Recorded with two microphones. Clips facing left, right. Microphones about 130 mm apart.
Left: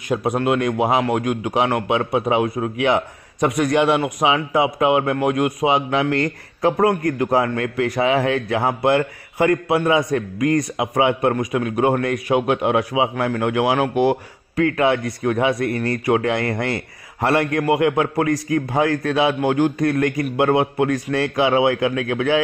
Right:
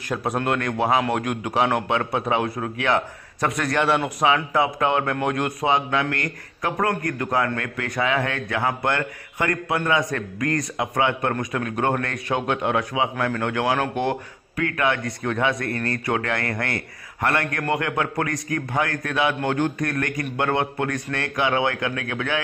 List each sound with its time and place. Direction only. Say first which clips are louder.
0.3 s a man's voice: left 4 dB; 5° left (ahead or behind)
2.5 s a man's voice: left 4 dB; 20° left (ahead or behind)
3.9 s a man's voice: left 2 dB; 5° left (ahead or behind)
4.5 s a man's voice: left 4 dB; 15° left (ahead or behind)
5.7 s a man's voice: left 1 dB; 20° left (ahead or behind)